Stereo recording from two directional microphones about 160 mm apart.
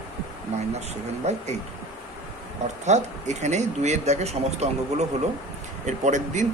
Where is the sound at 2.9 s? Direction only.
45° right (ahead or behind).